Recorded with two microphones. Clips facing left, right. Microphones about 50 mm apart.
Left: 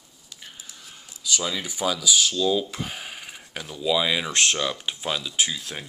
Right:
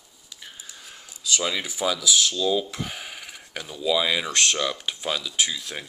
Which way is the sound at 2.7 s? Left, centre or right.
Centre.